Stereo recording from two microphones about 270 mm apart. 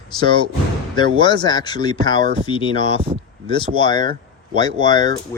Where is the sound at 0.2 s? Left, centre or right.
Centre.